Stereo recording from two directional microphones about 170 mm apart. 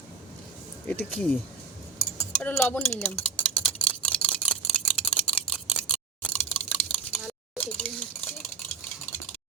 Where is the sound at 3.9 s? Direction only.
5° left (ahead or behind).